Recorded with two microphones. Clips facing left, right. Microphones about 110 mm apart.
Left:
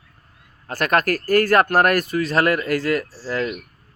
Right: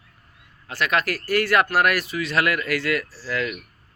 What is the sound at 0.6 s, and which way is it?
Speech, 45° left (ahead or behind).